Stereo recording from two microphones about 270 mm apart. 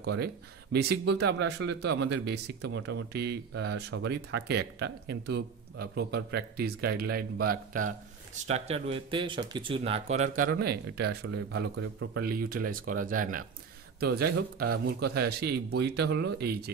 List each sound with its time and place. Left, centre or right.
0.0 s speech: right
8.5 s speech: right